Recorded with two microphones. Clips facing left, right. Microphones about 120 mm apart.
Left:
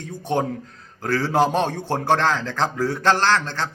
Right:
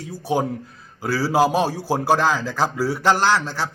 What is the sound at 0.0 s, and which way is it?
A man's voice, 5° right (ahead or behind).